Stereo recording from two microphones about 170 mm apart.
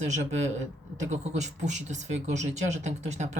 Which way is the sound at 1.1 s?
45° right (ahead or behind).